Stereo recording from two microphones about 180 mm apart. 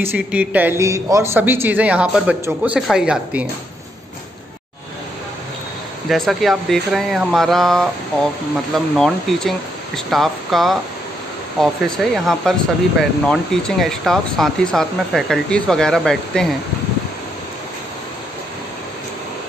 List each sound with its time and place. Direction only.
0.0 s a man's voice: 10° right (ahead or behind)
6.0 s speech: centre (ahead or behind)